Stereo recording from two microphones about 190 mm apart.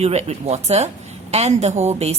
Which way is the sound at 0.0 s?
35° right (ahead or behind).